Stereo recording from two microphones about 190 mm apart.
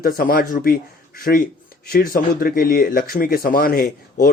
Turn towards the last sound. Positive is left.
turn(degrees=50)  # may be behind; listen again after turning